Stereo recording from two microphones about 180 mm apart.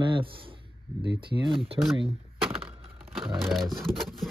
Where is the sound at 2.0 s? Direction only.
30° right (ahead or behind).